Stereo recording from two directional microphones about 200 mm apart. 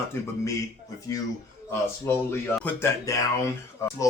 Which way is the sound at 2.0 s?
10° left (ahead or behind).